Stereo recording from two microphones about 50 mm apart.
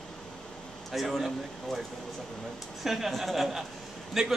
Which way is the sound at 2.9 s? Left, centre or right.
Centre.